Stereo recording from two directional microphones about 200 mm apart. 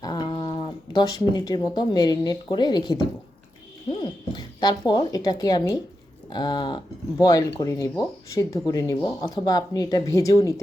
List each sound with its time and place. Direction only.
0.0 s speech: 20° left (ahead or behind)